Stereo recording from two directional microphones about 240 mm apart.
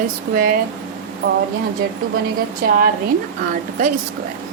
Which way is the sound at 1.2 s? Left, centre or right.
Right.